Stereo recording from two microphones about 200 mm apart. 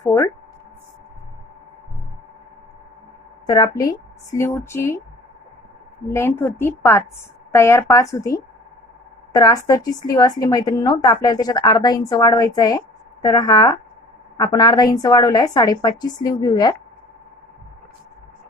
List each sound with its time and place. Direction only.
0.0 s speech: 10° left (ahead or behind)
3.4 s speech: 20° left (ahead or behind)
6.0 s a woman's voice: 10° left (ahead or behind)